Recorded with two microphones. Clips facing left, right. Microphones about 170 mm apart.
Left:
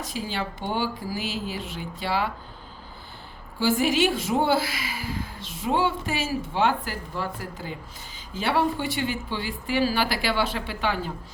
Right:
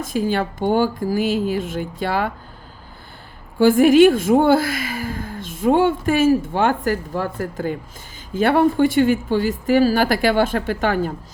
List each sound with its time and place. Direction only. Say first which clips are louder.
0.0 s a woman's voice: right 10 dB; 50° right (ahead or behind)
3.6 s a woman's voice: right 11 dB; 55° right (ahead or behind)